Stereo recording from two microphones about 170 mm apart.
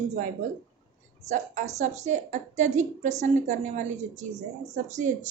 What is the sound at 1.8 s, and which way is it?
A woman's voice, 45° right (ahead or behind).